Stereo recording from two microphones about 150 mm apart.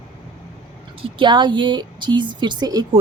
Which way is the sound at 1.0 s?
30° right (ahead or behind).